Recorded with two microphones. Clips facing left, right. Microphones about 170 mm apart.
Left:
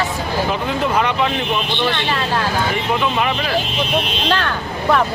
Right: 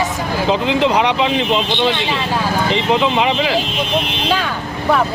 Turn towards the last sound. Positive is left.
turn(degrees=-20)  # may be behind; listen again after turning